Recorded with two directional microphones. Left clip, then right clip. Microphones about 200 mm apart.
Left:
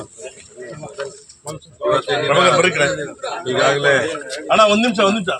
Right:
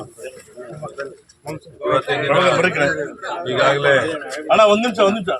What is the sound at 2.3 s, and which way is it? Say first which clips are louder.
Speech: left 2 dB; 25° left (ahead or behind).